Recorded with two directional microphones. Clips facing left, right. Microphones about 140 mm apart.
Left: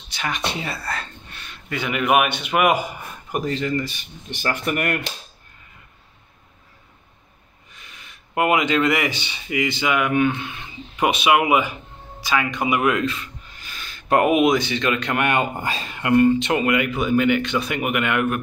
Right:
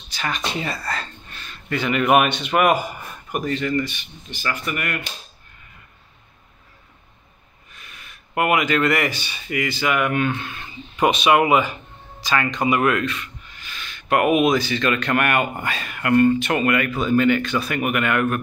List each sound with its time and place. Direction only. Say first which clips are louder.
0.6 s a man's voice: right 2 dB; 5° left (ahead or behind)
3.3 s speech: even; 25° left (ahead or behind)
4.3 s speech: left 3 dB; 55° left (ahead or behind)
7.8 s speech: right 1 dB; 25° left (ahead or behind)
13.0 s speech: left 2 dB; 30° left (ahead or behind)